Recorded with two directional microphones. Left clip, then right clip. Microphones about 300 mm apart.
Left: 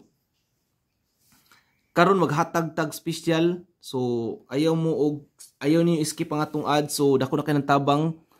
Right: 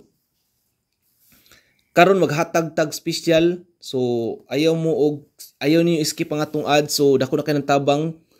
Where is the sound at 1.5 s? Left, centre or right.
Centre.